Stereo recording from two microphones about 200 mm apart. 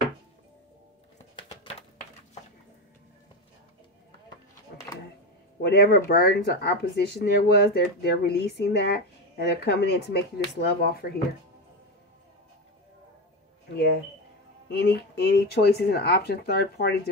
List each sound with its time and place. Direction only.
1.3 s a sound: 25° left (ahead or behind)
5.6 s speech: 50° left (ahead or behind)
14.7 s speech: 55° left (ahead or behind)